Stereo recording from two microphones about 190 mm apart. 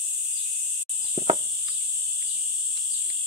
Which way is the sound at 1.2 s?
30° right (ahead or behind).